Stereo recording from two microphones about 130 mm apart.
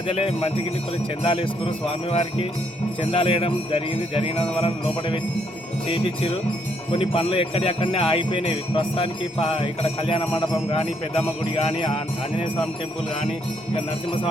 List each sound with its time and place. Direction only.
0.1 s speech: 45° left (ahead or behind)
13.7 s music: 40° left (ahead or behind)